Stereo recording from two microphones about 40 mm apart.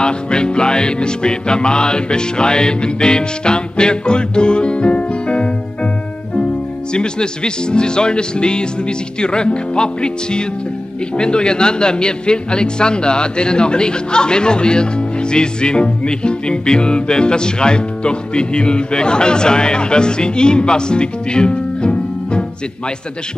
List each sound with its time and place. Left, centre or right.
0.0 s music: left
6.3 s a man's voice: left